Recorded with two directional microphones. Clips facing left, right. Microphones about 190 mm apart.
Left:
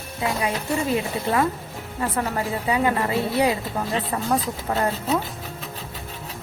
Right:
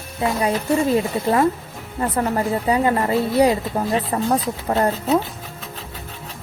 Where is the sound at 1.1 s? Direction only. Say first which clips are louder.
Right 5 dB; 45° right (ahead or behind).